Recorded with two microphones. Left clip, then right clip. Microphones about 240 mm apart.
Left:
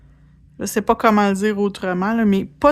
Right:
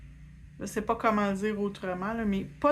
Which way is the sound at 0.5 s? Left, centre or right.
Left.